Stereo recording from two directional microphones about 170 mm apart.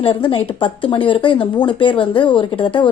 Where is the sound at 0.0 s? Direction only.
30° left (ahead or behind).